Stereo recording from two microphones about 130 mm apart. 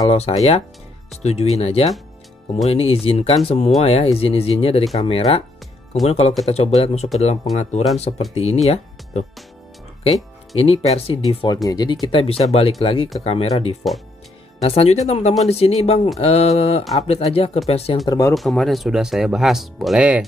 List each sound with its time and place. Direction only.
0.1 s speech: 55° left (ahead or behind)
10.5 s speech: 50° left (ahead or behind)
11.4 s speech: 30° left (ahead or behind); by 17.9 s 50° left (ahead or behind)
18.0 s speech: 30° left (ahead or behind)
18.3 s speech: centre (ahead or behind)